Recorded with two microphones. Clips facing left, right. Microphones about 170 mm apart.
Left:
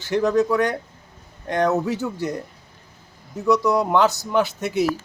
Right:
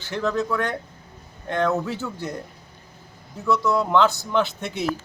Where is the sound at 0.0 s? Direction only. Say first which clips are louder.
Left 6 dB; 15° left (ahead or behind).